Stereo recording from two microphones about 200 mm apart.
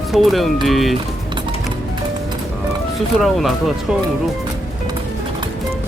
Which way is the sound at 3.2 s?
Centre (ahead or behind).